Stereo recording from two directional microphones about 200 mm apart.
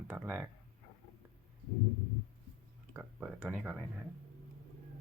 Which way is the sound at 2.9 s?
5° right (ahead or behind).